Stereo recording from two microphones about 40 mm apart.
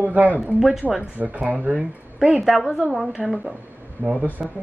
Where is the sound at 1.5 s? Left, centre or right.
Right.